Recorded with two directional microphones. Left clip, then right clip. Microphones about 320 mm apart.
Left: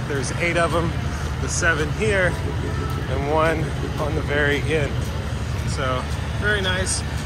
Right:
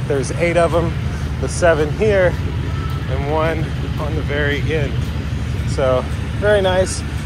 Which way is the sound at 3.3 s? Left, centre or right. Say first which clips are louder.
Right 1 dB; centre.